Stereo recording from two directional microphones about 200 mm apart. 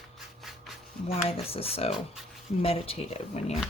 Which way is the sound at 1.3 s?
30° left (ahead or behind).